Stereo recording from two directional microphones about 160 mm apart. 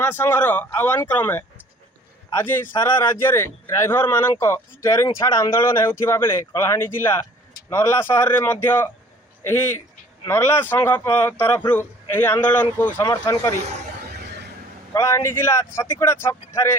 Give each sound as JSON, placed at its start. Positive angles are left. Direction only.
{"t": 0.0, "sound": "speech", "side_deg": 15}
{"t": 14.2, "sound": "a sound", "side_deg": -90}
{"t": 14.9, "sound": "speech", "side_deg": 15}